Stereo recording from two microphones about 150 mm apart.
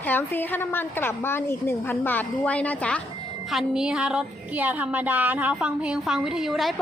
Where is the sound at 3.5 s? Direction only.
5° right (ahead or behind).